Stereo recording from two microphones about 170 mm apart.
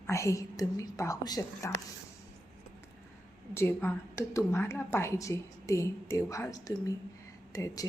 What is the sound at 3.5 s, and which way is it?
A woman's voice, 15° left (ahead or behind).